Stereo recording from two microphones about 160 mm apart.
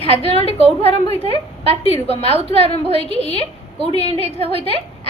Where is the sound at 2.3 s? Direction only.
35° right (ahead or behind).